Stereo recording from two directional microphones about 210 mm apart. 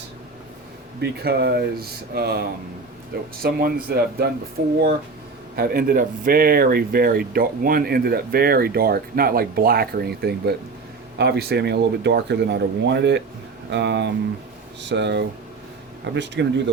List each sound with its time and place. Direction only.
1.0 s speech: 50° right (ahead or behind)